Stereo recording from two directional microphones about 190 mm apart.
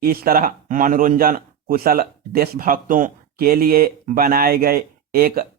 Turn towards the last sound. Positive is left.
turn(degrees=-50)  # may be behind; listen again after turning